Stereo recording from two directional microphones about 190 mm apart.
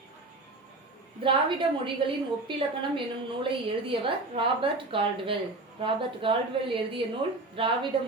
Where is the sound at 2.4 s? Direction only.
25° right (ahead or behind).